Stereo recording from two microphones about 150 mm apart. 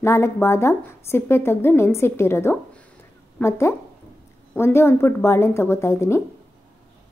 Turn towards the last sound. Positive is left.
turn(degrees=20)  # may be behind; listen again after turning